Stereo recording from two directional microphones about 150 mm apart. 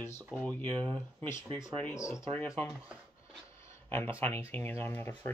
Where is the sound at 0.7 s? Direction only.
30° right (ahead or behind).